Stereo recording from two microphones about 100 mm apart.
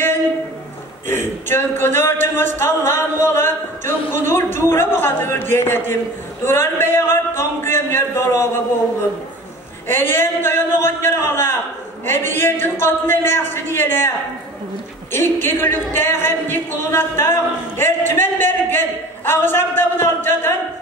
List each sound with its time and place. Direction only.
1.0 s speech: 25° left (ahead or behind)
9.8 s speech: 25° left (ahead or behind)
15.1 s speech: 25° left (ahead or behind)